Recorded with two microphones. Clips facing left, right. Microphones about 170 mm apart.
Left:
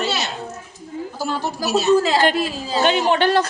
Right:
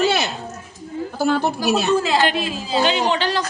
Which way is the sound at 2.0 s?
45° left (ahead or behind).